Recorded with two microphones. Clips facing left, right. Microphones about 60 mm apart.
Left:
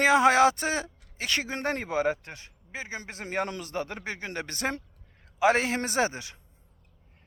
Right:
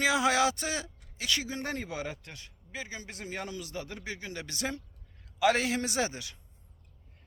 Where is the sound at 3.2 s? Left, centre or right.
Left.